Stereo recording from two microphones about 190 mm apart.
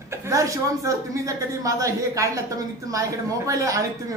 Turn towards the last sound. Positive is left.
turn(degrees=-20)  # may be behind; listen again after turning